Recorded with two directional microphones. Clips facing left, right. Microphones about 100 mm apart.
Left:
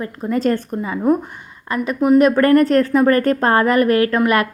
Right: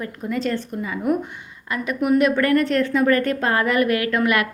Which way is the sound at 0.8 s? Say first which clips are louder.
Left 3 dB; 30° left (ahead or behind).